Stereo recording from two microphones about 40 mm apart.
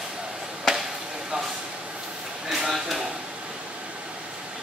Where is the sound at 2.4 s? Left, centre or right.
Centre.